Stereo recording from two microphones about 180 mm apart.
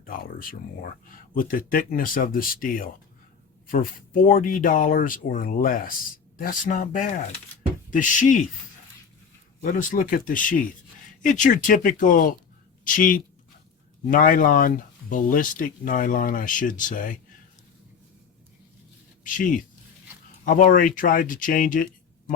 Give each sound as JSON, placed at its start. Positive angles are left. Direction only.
{"t": 0.0, "sound": "speech", "side_deg": 50}
{"t": 9.6, "sound": "speech", "side_deg": 50}
{"t": 19.2, "sound": "speech", "side_deg": 50}